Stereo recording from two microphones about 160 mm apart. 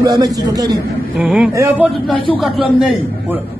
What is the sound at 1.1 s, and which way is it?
Speech, 5° right (ahead or behind).